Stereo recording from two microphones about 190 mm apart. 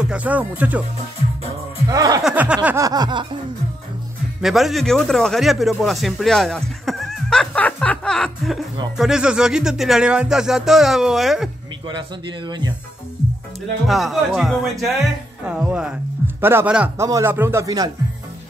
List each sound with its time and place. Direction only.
0.1 s speech: 10° right (ahead or behind)
1.9 s speech: 20° right (ahead or behind)
2.2 s speech: 5° right (ahead or behind); by 3.3 s 20° right (ahead or behind)
4.4 s speech: centre (ahead or behind)
11.9 s speech: 25° right (ahead or behind)
13.8 s speech: centre (ahead or behind); by 17.9 s 20° right (ahead or behind)